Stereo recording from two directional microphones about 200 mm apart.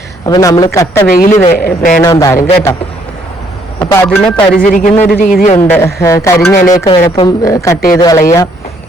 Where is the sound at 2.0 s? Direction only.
15° left (ahead or behind).